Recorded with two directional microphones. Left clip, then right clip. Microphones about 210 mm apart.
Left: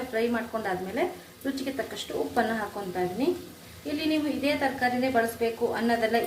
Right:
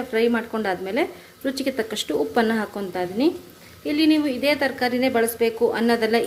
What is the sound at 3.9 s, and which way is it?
A woman's voice, 50° right (ahead or behind).